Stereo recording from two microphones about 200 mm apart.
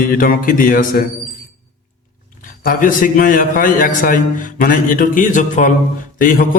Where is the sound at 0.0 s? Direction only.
45° left (ahead or behind).